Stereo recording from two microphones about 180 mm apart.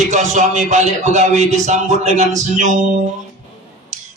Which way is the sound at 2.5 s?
40° right (ahead or behind).